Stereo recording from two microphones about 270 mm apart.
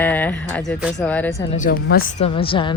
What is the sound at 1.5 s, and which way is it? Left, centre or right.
A woman's voice, left.